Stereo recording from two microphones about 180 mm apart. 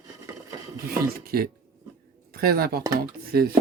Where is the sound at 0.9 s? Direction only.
55° right (ahead or behind).